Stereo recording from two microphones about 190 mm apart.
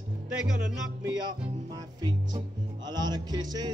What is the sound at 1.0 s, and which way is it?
Speech, 20° right (ahead or behind).